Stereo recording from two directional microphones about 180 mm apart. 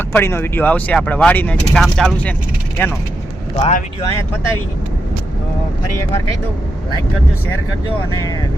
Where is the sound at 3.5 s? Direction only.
35° left (ahead or behind).